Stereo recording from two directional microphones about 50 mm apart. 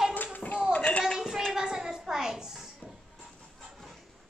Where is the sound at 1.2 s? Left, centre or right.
Centre.